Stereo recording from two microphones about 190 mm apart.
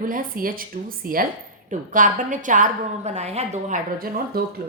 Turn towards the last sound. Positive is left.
turn(degrees=-50)  # may be behind; listen again after turning